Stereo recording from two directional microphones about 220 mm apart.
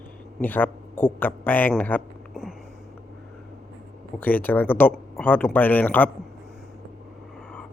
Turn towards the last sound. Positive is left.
turn(degrees=10)  # may be behind; listen again after turning